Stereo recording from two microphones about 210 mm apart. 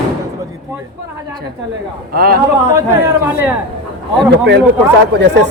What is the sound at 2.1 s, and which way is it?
Speech, 45° right (ahead or behind).